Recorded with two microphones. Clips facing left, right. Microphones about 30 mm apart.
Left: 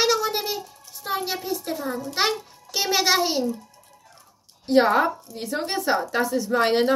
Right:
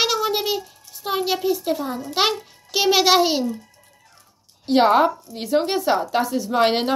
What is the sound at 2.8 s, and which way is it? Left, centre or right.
Speech, right.